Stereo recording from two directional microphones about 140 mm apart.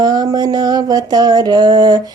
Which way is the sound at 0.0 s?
30° right (ahead or behind).